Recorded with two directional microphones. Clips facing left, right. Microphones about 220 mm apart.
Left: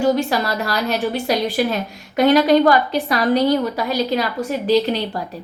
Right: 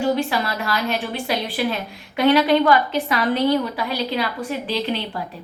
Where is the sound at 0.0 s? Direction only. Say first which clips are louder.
Left 3 dB; 40° left (ahead or behind).